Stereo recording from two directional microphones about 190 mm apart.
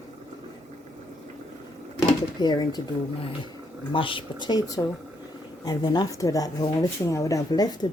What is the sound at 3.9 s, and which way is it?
Speech, 25° left (ahead or behind).